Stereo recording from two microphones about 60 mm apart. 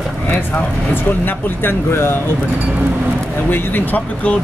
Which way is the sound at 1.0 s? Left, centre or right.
Left.